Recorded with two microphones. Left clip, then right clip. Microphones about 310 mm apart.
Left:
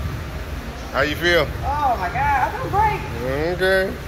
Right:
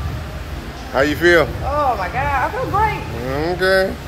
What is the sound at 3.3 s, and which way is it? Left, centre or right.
Speech, centre.